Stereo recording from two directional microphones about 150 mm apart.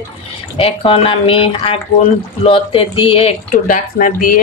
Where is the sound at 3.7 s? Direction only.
65° left (ahead or behind).